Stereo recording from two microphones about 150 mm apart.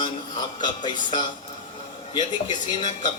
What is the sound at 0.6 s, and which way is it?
A man's voice, 30° left (ahead or behind).